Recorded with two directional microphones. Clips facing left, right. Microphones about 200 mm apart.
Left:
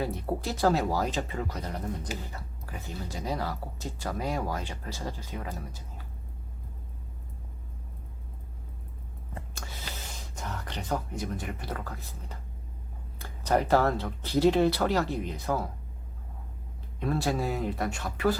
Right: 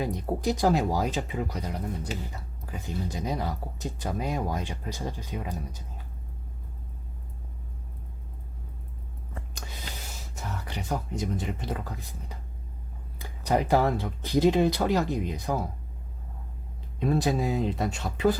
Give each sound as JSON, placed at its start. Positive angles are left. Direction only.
{"t": 0.0, "sound": "speech", "side_deg": -15}
{"t": 2.8, "sound": "speech", "side_deg": -20}
{"t": 9.6, "sound": "a sound", "side_deg": -15}
{"t": 13.1, "sound": "speech", "side_deg": -15}
{"t": 17.0, "sound": "speech", "side_deg": -20}